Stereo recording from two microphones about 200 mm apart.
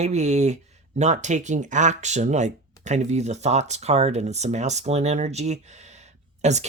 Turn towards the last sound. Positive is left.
turn(degrees=-35)  # may be behind; listen again after turning